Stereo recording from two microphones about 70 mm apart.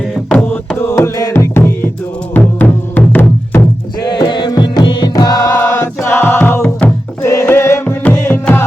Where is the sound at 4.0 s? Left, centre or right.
Left.